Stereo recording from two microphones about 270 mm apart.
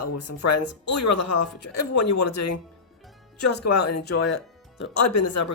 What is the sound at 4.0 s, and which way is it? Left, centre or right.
Speech, left.